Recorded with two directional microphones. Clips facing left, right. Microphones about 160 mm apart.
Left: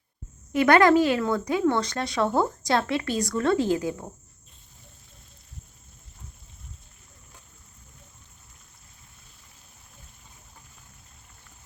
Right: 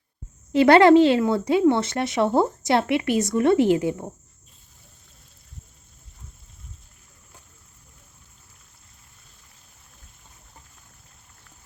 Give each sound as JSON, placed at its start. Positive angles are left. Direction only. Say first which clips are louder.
{"t": 0.5, "sound": "speech", "louder": "right 5 dB", "side_deg": -30}